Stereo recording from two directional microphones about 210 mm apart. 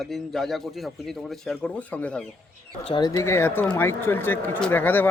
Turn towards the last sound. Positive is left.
turn(degrees=10)  # may be behind; listen again after turning